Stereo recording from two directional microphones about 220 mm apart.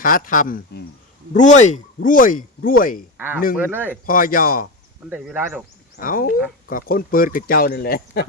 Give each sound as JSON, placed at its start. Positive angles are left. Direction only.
{"t": 0.0, "sound": "speech", "side_deg": 40}
{"t": 3.6, "sound": "speech", "side_deg": -10}
{"t": 4.0, "sound": "speech", "side_deg": 40}
{"t": 5.0, "sound": "a man's voice", "side_deg": 0}
{"t": 6.0, "sound": "speech", "side_deg": 40}